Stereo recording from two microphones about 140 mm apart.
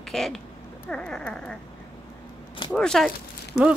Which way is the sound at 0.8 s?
5° left (ahead or behind).